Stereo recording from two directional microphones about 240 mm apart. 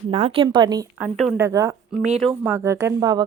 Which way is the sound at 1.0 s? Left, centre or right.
Centre.